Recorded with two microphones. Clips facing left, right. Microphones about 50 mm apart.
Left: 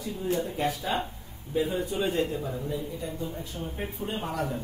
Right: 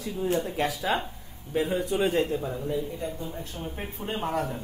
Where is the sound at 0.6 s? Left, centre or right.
Right.